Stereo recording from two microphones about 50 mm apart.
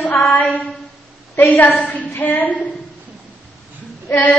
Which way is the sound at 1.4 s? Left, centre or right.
Left.